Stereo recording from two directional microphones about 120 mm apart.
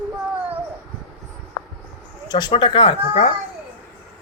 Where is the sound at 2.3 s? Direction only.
40° left (ahead or behind).